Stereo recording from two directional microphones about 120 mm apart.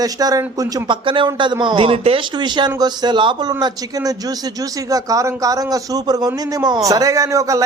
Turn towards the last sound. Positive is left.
turn(degrees=-30)  # may be behind; listen again after turning